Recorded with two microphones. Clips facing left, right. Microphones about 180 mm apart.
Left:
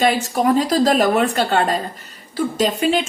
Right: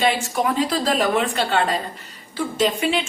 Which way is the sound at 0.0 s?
40° left (ahead or behind).